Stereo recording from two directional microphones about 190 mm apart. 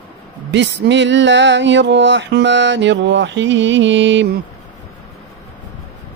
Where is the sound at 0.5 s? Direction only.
65° right (ahead or behind).